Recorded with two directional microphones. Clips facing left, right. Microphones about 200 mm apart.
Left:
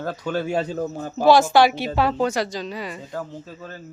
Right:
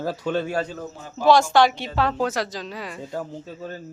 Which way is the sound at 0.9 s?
45° left (ahead or behind).